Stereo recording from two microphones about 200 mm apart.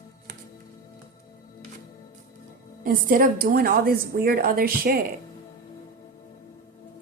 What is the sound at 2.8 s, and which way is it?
A woman's voice, 45° right (ahead or behind).